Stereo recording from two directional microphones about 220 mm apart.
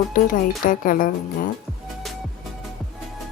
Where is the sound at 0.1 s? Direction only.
40° left (ahead or behind).